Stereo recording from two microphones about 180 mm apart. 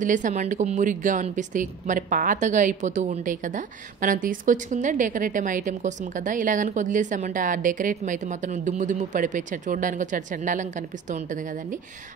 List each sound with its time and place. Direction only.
0.0 s speech: 45° right (ahead or behind)